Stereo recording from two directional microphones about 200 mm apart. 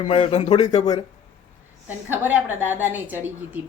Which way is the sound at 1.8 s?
10° right (ahead or behind).